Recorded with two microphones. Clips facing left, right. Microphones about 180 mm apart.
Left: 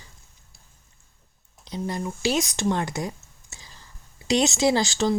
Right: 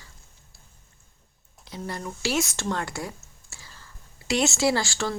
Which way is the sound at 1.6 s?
20° left (ahead or behind).